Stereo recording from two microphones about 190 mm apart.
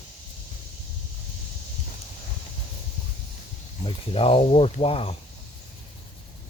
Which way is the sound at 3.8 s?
30° left (ahead or behind).